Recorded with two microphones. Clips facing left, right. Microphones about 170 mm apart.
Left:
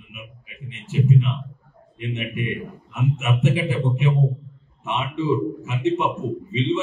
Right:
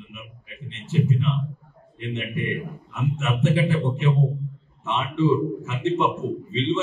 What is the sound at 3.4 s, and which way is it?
A man's voice, 15° left (ahead or behind).